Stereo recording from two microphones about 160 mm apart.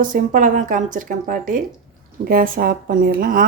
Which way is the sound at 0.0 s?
55° right (ahead or behind).